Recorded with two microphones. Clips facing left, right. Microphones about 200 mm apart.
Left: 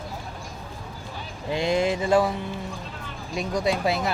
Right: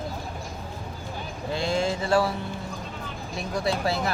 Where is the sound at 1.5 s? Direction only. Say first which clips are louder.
Left 3 dB; 20° left (ahead or behind).